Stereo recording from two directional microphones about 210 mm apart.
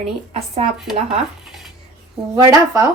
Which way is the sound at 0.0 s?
30° right (ahead or behind).